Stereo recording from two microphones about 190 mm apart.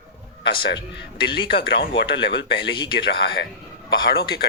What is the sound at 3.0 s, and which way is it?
Speech, 60° left (ahead or behind).